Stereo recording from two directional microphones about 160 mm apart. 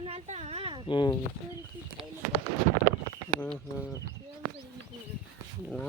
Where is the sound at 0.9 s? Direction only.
30° left (ahead or behind).